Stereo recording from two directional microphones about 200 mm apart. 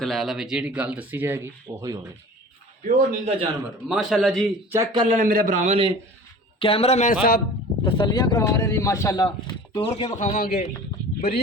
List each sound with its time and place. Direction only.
0.0 s speech: centre (ahead or behind)
2.8 s a man's voice: 35° right (ahead or behind)
3.8 s a man's voice: centre (ahead or behind)
4.7 s speech: 20° right (ahead or behind)
5.0 s a man's voice: 40° right (ahead or behind)
6.6 s speech: 30° left (ahead or behind); by 7.4 s 45° left (ahead or behind)
7.9 s speech: 25° left (ahead or behind)
9.9 s speech: 35° left (ahead or behind)